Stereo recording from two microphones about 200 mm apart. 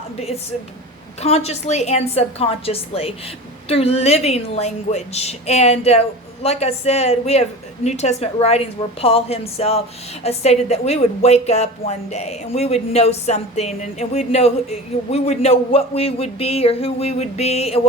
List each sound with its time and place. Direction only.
1.2 s a woman's voice: 30° left (ahead or behind)